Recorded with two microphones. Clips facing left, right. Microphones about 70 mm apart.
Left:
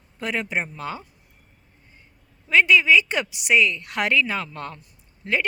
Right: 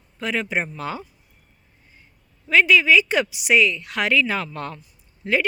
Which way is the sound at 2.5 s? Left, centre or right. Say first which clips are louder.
Right 1 dB; centre.